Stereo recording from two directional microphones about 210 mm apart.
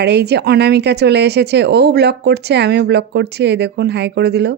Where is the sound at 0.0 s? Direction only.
50° right (ahead or behind).